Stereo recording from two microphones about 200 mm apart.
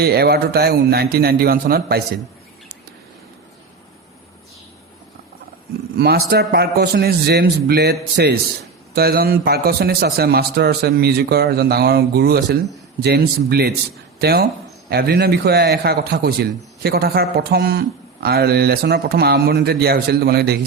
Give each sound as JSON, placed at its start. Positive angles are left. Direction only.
{"t": 0.0, "sound": "a man's voice", "side_deg": -50}
{"t": 6.0, "sound": "a man's voice", "side_deg": -50}